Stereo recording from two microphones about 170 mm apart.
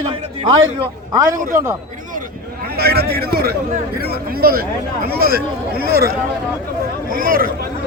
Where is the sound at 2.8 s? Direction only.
65° right (ahead or behind).